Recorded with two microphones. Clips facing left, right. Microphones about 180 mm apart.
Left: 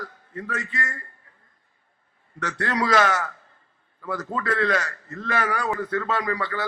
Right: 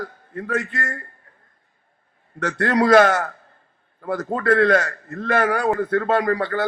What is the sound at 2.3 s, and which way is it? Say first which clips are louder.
A man's voice: right 6 dB; 55° right (ahead or behind).